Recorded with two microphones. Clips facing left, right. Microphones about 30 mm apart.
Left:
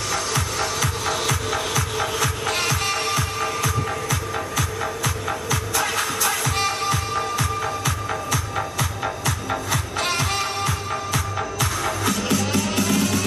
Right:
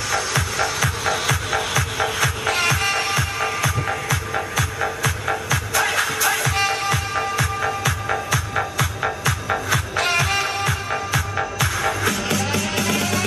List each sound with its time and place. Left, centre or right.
0.3 s music: centre